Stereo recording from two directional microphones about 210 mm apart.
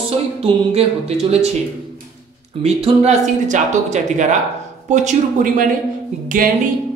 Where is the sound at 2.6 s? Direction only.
30° right (ahead or behind).